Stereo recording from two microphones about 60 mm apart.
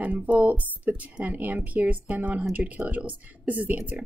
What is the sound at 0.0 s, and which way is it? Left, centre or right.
Speech, right.